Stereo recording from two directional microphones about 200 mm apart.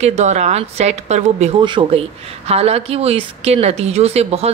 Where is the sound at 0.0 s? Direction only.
35° right (ahead or behind).